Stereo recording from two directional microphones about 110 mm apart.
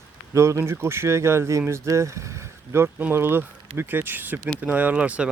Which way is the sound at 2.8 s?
15° right (ahead or behind).